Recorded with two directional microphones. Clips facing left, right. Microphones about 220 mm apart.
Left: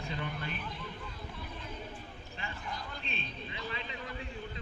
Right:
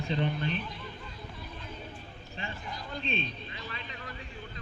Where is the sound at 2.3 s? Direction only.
25° right (ahead or behind).